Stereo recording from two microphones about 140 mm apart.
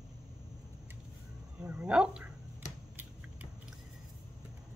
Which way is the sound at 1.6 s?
10° right (ahead or behind).